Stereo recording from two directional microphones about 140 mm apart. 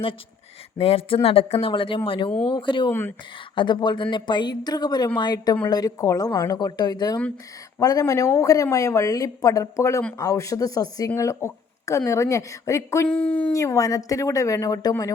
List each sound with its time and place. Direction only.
0.8 s speech: 45° left (ahead or behind)
2.9 s speech: 15° left (ahead or behind)
3.5 s speech: 35° left (ahead or behind)
13.1 s speech: 10° left (ahead or behind)
13.5 s speech: 25° left (ahead or behind)